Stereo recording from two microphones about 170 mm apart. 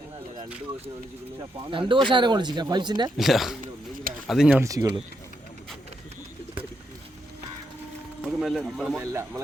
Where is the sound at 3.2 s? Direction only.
Centre (ahead or behind).